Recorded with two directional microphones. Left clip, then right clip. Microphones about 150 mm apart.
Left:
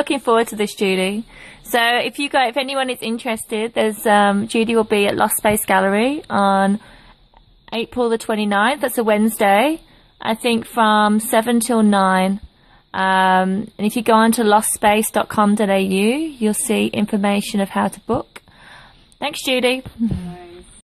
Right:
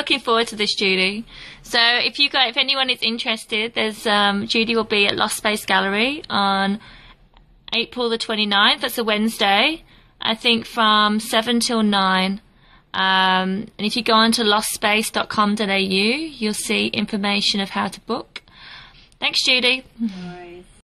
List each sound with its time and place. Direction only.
0.0 s a woman's voice: 50° left (ahead or behind)